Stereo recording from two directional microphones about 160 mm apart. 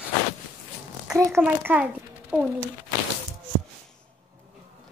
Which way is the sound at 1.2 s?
15° right (ahead or behind).